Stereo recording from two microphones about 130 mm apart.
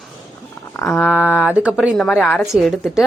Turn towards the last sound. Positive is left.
turn(degrees=0)  # may be behind; listen again after turning